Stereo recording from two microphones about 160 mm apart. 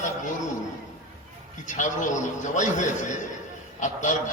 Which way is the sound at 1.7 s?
50° left (ahead or behind).